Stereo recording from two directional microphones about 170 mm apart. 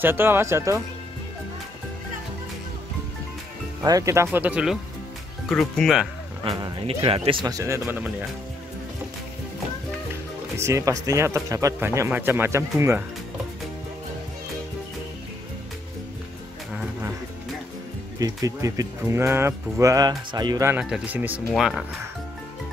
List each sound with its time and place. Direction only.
0.0 s speech: 15° right (ahead or behind)
3.8 s speech: 20° right (ahead or behind); by 6.0 s centre (ahead or behind)
6.4 s speech: 30° right (ahead or behind); by 8.1 s 10° right (ahead or behind)
10.6 s speech: 20° right (ahead or behind)
18.2 s speech: 20° right (ahead or behind)
20.8 s speech: 5° right (ahead or behind)